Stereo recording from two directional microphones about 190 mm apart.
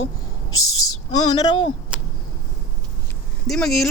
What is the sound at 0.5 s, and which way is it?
Speech, 90° left.